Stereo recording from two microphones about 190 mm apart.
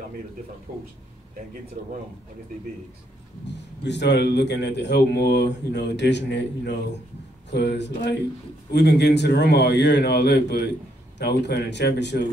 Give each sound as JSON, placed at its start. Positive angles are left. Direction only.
{"t": 3.8, "sound": "a man's voice", "side_deg": 65}